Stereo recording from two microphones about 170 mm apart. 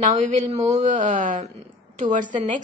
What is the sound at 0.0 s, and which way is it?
Speech, 45° right (ahead or behind).